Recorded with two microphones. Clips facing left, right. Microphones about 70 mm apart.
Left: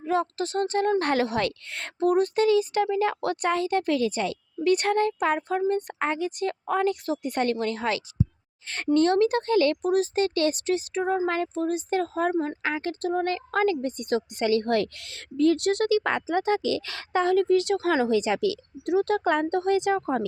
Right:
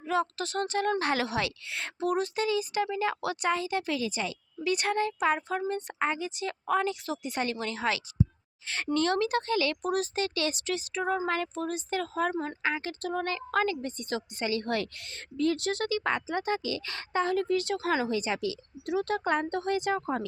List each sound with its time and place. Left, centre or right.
0.1 s a woman's voice: left
6.0 s a woman's voice: left
12.3 s speech: left
12.6 s a woman's voice: left
18.1 s speech: left
19.0 s a woman's voice: left